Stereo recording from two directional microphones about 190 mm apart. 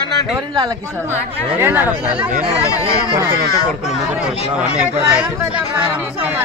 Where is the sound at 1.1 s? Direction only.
10° right (ahead or behind).